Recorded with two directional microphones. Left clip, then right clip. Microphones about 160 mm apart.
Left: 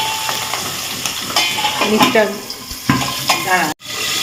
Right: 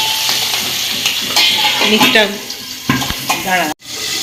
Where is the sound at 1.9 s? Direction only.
10° left (ahead or behind).